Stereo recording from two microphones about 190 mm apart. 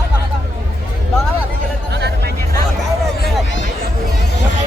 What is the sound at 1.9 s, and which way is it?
Music, 60° right (ahead or behind).